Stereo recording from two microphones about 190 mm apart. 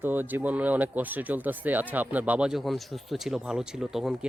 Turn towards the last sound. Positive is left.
turn(degrees=0)  # may be behind; listen again after turning